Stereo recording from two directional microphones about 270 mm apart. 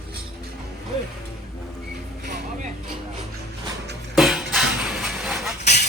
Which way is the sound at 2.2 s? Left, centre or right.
Right.